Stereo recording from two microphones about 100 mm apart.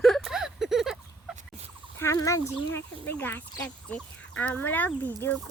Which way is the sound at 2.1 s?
30° left (ahead or behind).